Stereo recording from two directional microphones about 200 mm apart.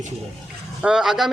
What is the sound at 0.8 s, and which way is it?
Speech, 5° right (ahead or behind).